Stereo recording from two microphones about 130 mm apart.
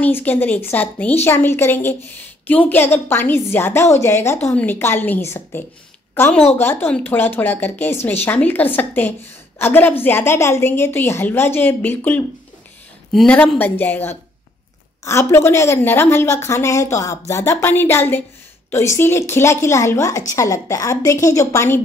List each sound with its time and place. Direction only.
0.0 s a woman's voice: 15° left (ahead or behind)